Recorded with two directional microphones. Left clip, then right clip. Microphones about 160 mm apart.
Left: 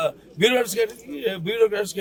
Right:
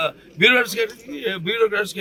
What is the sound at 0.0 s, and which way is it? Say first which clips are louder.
A man's voice: right 3 dB; 25° left (ahead or behind).